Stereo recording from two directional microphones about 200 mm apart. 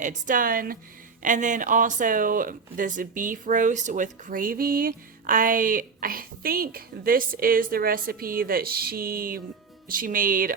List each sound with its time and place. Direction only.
0.0 s speech: 40° right (ahead or behind)